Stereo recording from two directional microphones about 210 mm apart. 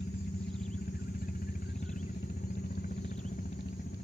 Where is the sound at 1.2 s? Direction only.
45° left (ahead or behind).